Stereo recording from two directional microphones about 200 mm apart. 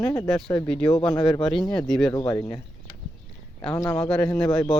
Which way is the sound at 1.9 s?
5° left (ahead or behind).